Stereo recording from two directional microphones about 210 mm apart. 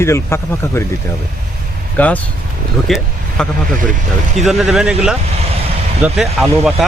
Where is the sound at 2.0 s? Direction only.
5° left (ahead or behind).